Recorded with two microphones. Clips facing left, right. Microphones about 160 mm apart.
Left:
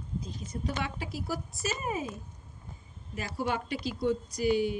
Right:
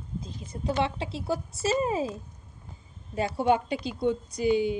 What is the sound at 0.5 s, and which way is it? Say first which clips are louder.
A woman's voice: right 7 dB; 25° right (ahead or behind).